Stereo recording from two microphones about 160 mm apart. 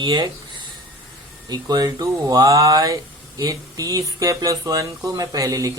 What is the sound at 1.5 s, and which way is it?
Speech, 25° right (ahead or behind).